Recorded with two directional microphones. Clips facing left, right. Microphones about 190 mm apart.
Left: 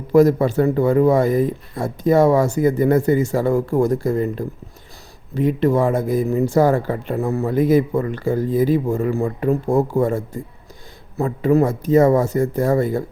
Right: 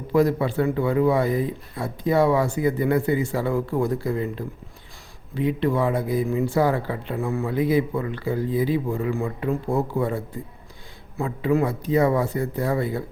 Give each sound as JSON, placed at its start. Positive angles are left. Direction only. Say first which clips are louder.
{"t": 0.1, "sound": "speech", "louder": "left 6 dB", "side_deg": 45}